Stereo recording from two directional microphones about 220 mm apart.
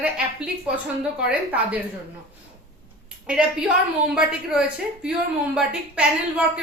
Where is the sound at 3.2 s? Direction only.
5° right (ahead or behind).